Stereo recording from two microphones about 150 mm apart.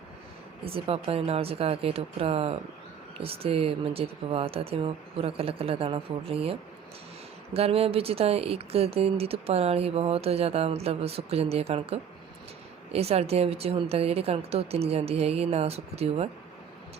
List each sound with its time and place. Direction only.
0.6 s a woman's voice: 40° right (ahead or behind)